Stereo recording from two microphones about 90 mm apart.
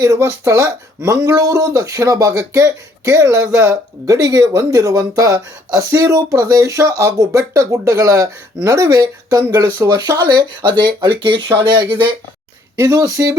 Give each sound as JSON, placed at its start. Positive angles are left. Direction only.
{"t": 0.0, "sound": "speech", "side_deg": -35}
{"t": 9.7, "sound": "speech", "side_deg": -30}
{"t": 10.2, "sound": "speech", "side_deg": -55}
{"t": 11.6, "sound": "speech", "side_deg": -50}
{"t": 12.8, "sound": "speech", "side_deg": -40}